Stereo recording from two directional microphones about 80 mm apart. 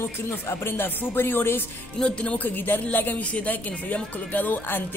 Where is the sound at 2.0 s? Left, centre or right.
Centre.